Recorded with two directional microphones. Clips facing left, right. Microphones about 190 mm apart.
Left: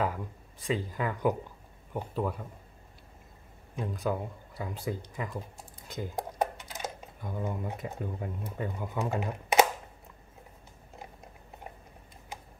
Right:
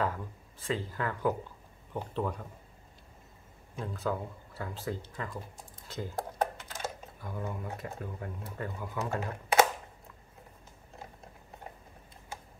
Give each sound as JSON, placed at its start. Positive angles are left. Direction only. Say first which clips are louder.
{"t": 0.0, "sound": "speech", "louder": "left 1 dB", "side_deg": 10}
{"t": 3.7, "sound": "speech", "louder": "left 2 dB", "side_deg": 15}